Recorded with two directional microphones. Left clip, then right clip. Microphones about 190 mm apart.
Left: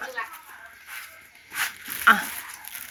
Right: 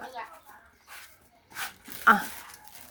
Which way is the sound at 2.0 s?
25° right (ahead or behind).